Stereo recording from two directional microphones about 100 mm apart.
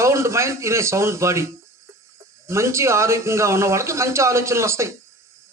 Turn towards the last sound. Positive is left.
turn(degrees=-30)  # may be behind; listen again after turning